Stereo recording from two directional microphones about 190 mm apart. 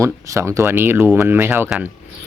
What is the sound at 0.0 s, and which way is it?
Speech, 15° right (ahead or behind).